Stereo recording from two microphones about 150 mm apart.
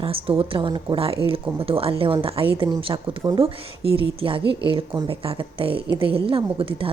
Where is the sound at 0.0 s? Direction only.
40° right (ahead or behind).